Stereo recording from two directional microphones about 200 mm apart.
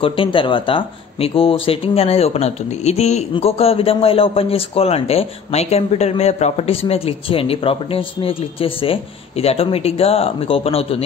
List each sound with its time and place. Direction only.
0.0 s speech: 25° left (ahead or behind)